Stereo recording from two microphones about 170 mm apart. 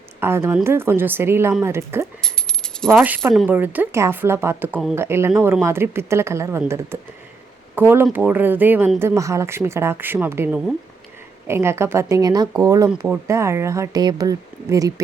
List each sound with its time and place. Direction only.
0.2 s speech: 15° right (ahead or behind)
2.2 s rattle: 5° left (ahead or behind)
3.3 s speech: 10° right (ahead or behind)